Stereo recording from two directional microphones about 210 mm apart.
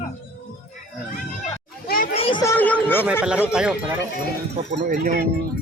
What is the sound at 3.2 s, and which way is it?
Speech, 5° right (ahead or behind).